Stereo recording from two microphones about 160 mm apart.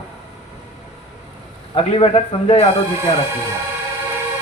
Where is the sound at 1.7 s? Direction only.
40° left (ahead or behind).